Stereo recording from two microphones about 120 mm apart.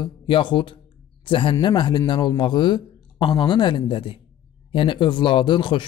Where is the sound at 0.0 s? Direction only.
40° left (ahead or behind).